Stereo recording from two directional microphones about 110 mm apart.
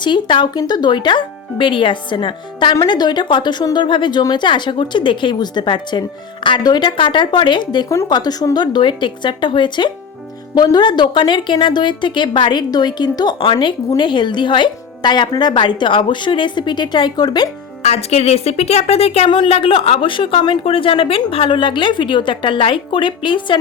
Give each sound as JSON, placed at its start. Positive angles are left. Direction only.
{"t": 0.0, "sound": "speech", "side_deg": 45}
{"t": 7.9, "sound": "speech", "side_deg": 30}
{"t": 17.8, "sound": "a woman's voice", "side_deg": 75}
{"t": 19.3, "sound": "speech", "side_deg": 55}